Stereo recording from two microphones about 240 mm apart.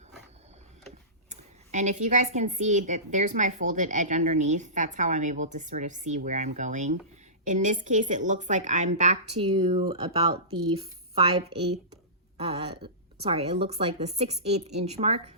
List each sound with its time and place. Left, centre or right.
1.3 s a woman's voice: right
12.4 s speech: right